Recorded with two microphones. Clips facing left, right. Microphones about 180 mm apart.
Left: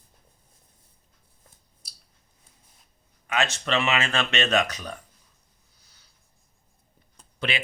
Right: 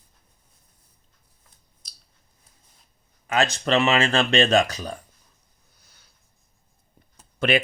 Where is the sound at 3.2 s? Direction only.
35° right (ahead or behind).